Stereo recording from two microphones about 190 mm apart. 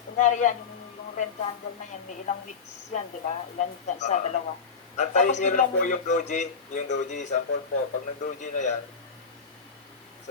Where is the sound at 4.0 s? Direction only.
40° left (ahead or behind).